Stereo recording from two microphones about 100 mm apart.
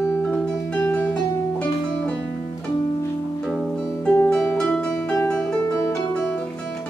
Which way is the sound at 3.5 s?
5° left (ahead or behind).